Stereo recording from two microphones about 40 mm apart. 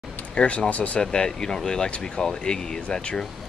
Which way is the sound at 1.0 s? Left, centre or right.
Centre.